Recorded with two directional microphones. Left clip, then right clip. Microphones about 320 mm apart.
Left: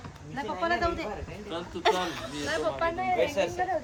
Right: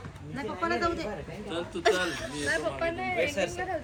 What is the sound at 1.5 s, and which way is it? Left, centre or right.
Speech, centre.